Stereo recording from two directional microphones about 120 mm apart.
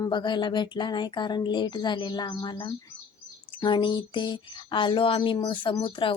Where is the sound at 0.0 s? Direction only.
40° left (ahead or behind).